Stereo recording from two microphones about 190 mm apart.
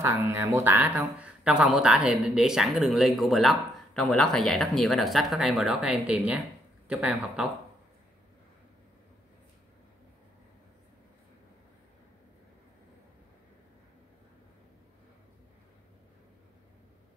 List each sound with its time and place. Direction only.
0.0 s speech: 15° right (ahead or behind)